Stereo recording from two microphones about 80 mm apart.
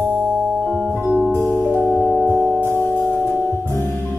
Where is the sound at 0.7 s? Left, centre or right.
Centre.